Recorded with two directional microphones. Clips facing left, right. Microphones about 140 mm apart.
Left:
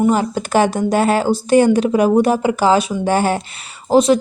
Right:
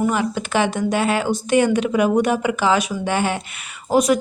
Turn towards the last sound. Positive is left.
turn(degrees=30)  # may be behind; listen again after turning